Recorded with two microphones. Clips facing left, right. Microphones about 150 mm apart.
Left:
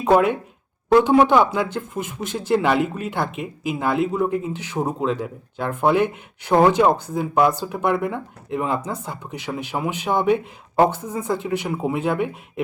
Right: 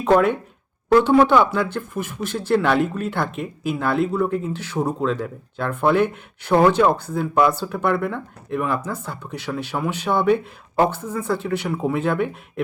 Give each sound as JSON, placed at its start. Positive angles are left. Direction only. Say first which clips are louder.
{"t": 0.0, "sound": "speech", "louder": "even", "side_deg": 10}